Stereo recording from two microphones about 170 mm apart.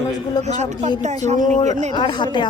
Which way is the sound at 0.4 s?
40° right (ahead or behind).